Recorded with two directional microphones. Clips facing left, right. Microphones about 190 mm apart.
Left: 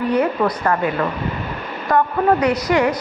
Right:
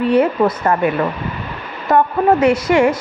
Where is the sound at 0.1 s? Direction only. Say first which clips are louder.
Right 4 dB; 25° right (ahead or behind).